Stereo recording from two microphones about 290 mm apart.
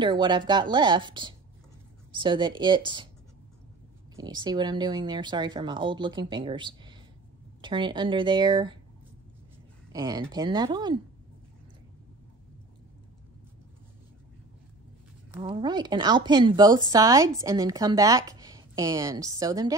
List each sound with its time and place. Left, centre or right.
0.0 s speech: centre
4.2 s speech: centre
9.9 s speech: centre
15.4 s speech: centre